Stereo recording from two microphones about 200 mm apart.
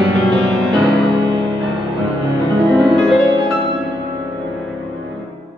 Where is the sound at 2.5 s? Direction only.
Centre (ahead or behind).